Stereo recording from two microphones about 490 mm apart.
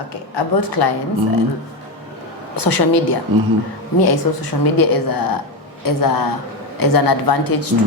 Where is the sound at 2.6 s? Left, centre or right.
Left.